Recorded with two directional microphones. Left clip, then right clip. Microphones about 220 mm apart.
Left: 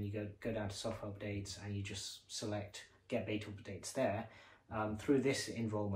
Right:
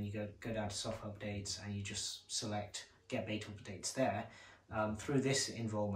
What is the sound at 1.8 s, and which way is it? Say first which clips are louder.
Speech: right 3 dB; 30° left (ahead or behind).